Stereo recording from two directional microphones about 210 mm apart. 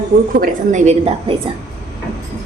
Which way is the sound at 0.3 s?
40° right (ahead or behind).